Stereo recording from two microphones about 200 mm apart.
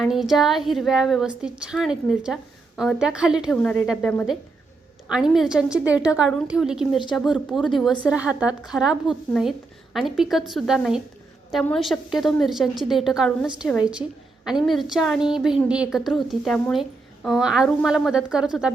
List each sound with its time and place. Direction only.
0.0 s a woman's voice: centre (ahead or behind)